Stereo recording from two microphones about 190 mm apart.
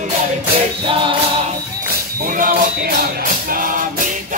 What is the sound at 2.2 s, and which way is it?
Music, 45° right (ahead or behind).